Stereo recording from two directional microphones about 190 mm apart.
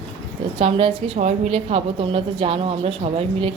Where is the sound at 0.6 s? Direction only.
30° right (ahead or behind).